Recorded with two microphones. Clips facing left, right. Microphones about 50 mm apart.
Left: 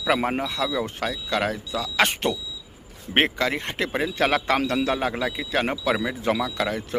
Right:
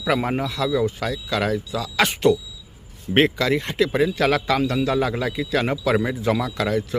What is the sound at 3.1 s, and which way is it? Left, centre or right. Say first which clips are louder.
Speech: right 4 dB; left.